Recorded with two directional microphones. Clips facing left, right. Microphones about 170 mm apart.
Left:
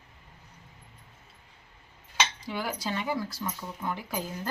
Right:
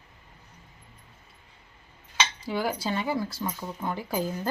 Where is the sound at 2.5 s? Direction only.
35° right (ahead or behind).